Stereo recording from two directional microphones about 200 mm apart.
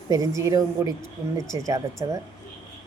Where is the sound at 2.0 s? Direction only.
20° right (ahead or behind).